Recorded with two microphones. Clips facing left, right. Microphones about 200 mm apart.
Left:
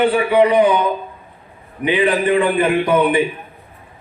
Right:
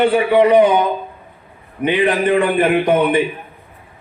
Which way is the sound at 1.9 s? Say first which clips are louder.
Even; 40° right (ahead or behind).